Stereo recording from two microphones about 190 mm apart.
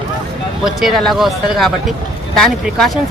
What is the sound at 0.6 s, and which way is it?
Speech, centre (ahead or behind).